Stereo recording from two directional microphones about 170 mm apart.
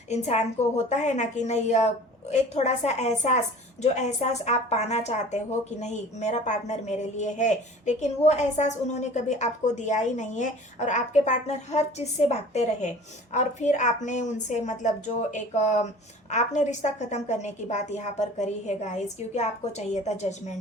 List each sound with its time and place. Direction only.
0.1 s a woman's voice: 40° left (ahead or behind)